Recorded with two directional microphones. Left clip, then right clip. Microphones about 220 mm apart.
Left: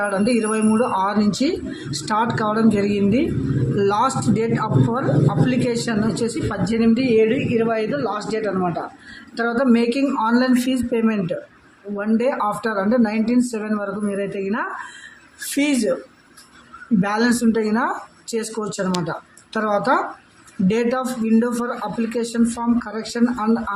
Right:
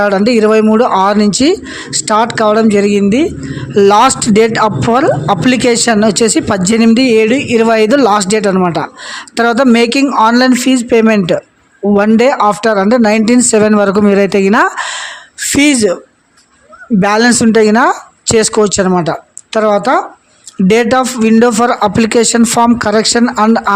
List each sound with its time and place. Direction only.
0.0 s speech: 40° right (ahead or behind)
15.5 s speech: 40° right (ahead or behind)
17.0 s speech: 40° right (ahead or behind)